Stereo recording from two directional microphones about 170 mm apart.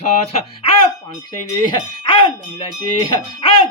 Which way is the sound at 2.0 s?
30° left (ahead or behind).